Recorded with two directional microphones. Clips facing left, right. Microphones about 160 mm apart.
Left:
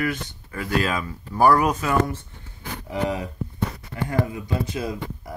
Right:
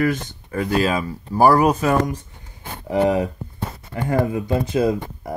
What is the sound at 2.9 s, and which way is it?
Speech, 50° right (ahead or behind).